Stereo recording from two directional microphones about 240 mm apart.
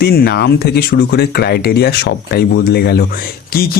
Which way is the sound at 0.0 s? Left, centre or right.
Left.